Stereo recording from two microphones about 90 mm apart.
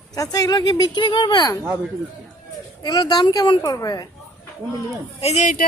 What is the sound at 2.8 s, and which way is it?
A woman's voice, 50° left (ahead or behind).